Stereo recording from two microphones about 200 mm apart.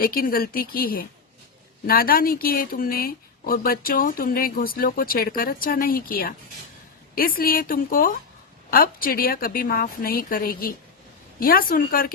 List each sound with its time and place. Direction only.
0.0 s speech: 45° left (ahead or behind)